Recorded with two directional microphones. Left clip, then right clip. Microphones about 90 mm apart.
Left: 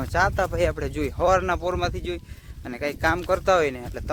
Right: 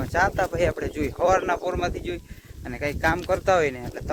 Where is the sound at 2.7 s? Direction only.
35° left (ahead or behind).